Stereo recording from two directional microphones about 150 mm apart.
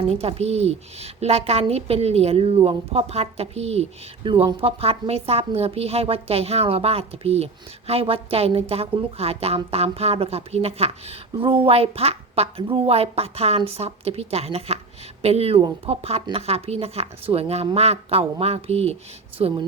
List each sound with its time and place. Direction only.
0.1 s a woman's voice: 45° right (ahead or behind)